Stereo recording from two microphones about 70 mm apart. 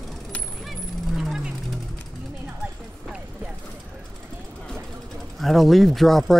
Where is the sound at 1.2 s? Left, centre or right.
Centre.